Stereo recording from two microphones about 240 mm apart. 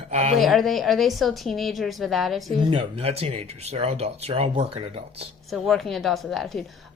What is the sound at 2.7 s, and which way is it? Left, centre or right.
Speech, right.